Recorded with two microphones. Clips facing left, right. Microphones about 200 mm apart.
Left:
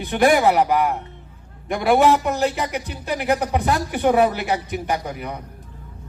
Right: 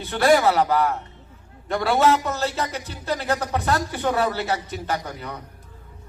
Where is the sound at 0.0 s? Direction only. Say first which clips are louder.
Left 2 dB; 15° left (ahead or behind).